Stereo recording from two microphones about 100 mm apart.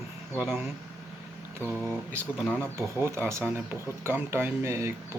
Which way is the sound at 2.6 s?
25° right (ahead or behind).